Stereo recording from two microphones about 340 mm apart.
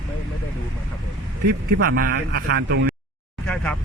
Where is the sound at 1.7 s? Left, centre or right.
Right.